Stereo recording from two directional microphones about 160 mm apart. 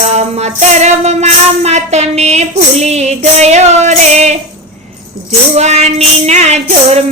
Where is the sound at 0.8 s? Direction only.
45° right (ahead or behind).